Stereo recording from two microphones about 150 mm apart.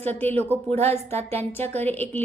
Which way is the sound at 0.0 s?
10° left (ahead or behind).